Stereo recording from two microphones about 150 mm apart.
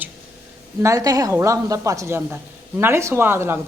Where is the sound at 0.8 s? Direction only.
20° right (ahead or behind).